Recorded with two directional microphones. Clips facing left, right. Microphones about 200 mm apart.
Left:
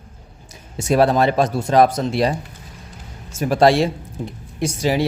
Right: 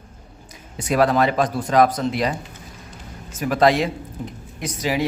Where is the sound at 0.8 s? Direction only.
30° left (ahead or behind).